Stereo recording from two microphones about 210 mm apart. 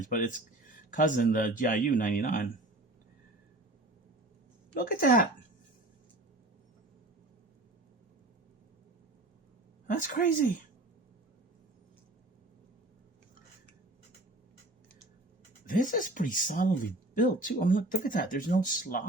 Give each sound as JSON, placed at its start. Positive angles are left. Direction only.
{"t": 0.0, "sound": "speech", "side_deg": 40}
{"t": 4.7, "sound": "speech", "side_deg": 40}
{"t": 9.8, "sound": "speech", "side_deg": 40}
{"t": 15.6, "sound": "speech", "side_deg": 40}